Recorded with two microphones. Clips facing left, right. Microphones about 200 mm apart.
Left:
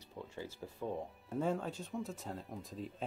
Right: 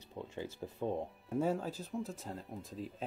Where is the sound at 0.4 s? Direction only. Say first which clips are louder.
Right 4 dB; 25° right (ahead or behind).